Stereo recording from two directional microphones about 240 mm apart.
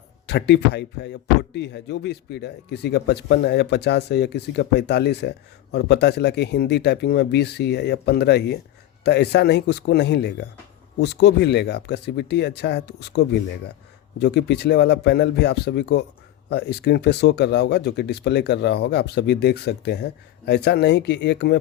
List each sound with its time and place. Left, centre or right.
0.3 s speech: left